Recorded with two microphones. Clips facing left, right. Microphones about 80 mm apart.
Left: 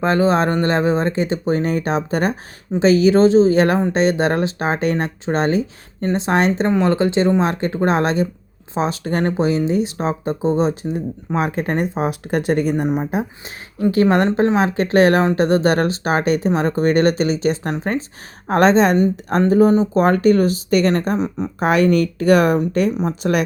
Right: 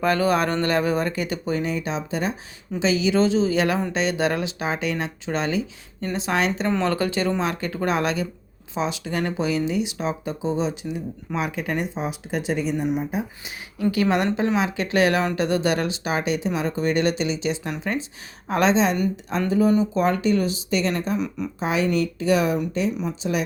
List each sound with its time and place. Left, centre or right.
0.0 s speech: left
6.7 s speech: left
13.9 s speech: left
21.2 s speech: left
21.6 s a woman's voice: left